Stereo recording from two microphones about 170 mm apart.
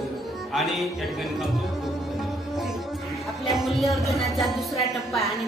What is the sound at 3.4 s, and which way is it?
Speech, centre (ahead or behind).